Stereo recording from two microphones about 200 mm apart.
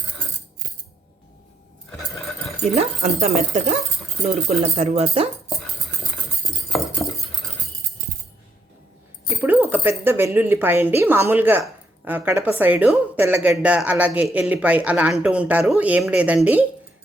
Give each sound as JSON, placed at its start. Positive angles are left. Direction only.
{"t": 1.9, "sound": "a sound", "side_deg": 5}
{"t": 2.7, "sound": "speech", "side_deg": -35}
{"t": 9.3, "sound": "speech", "side_deg": -10}